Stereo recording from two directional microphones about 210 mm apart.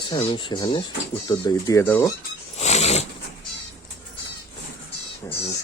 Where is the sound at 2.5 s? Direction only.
30° left (ahead or behind).